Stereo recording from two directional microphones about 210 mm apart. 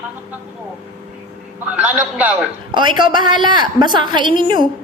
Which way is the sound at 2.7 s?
20° right (ahead or behind).